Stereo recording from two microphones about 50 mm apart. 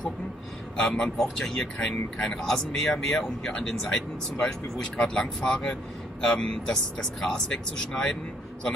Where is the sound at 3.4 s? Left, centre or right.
Centre.